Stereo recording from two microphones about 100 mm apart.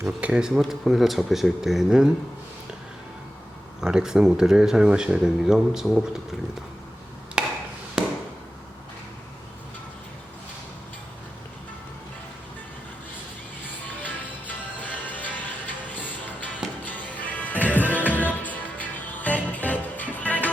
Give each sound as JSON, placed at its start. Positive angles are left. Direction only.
{"t": 0.0, "sound": "speech", "side_deg": -10}
{"t": 3.8, "sound": "speech", "side_deg": -5}
{"t": 7.4, "sound": "chop", "side_deg": -10}
{"t": 8.0, "sound": "fireworks", "side_deg": -5}
{"t": 13.8, "sound": "music", "side_deg": 15}